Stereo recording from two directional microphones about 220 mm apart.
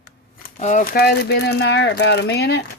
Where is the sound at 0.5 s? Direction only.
35° left (ahead or behind).